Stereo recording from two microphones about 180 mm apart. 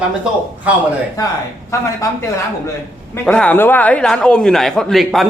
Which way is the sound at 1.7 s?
15° left (ahead or behind).